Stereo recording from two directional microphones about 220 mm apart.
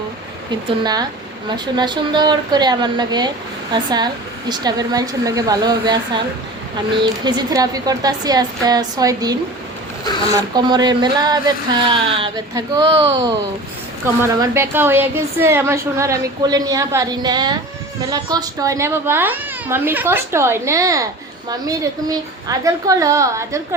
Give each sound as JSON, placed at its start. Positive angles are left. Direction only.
{"t": 0.5, "sound": "a woman's voice", "side_deg": -20}